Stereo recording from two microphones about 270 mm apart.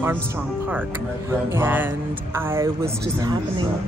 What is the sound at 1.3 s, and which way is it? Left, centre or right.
Speech, centre.